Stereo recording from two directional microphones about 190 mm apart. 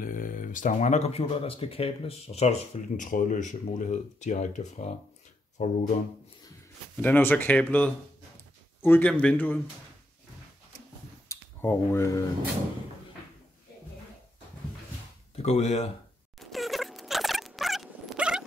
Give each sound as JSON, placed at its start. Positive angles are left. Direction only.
{"t": 0.0, "sound": "speech", "side_deg": 45}
{"t": 3.1, "sound": "speech", "side_deg": 45}
{"t": 7.0, "sound": "speech", "side_deg": 10}
{"t": 11.2, "sound": "speech", "side_deg": 15}
{"t": 15.3, "sound": "speech", "side_deg": 35}
{"t": 16.3, "sound": "dog", "side_deg": 0}